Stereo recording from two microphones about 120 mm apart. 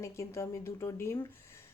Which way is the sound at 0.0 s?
25° left (ahead or behind).